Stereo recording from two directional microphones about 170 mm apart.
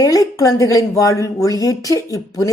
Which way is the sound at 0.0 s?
20° left (ahead or behind).